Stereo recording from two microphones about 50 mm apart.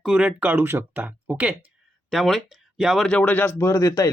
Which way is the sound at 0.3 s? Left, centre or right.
Right.